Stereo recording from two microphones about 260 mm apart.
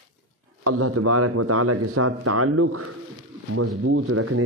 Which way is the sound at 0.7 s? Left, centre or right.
Right.